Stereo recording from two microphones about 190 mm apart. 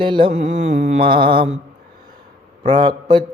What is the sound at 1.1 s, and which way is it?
Mantra, 25° right (ahead or behind).